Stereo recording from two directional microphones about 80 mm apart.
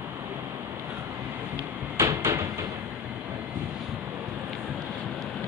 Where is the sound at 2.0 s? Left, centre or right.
Right.